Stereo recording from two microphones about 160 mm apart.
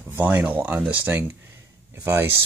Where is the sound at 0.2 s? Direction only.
10° right (ahead or behind).